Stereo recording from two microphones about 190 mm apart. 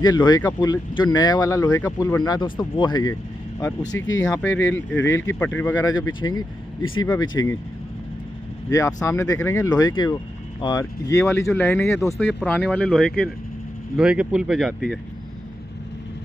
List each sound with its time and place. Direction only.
0.0 s speech: 20° left (ahead or behind)
4.2 s speech: 5° left (ahead or behind)
6.8 s speech: 90° left
7.1 s speech: 15° left (ahead or behind)
8.6 s speech: 15° left (ahead or behind); by 14.7 s 5° right (ahead or behind)